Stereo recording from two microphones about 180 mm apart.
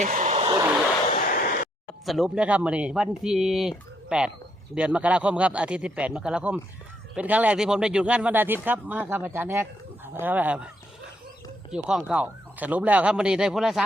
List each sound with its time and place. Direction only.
0.0 s vehicle: 40° right (ahead or behind)
0.4 s vehicle: 20° right (ahead or behind)
2.0 s speech: centre (ahead or behind)
11.7 s speech: 5° right (ahead or behind)